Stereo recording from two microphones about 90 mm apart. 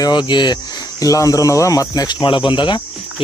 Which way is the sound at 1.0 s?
40° left (ahead or behind).